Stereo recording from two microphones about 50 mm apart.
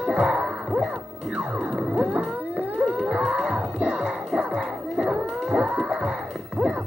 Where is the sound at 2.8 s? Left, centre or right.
Centre.